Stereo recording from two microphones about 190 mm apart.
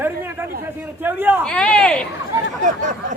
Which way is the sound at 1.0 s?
10° right (ahead or behind).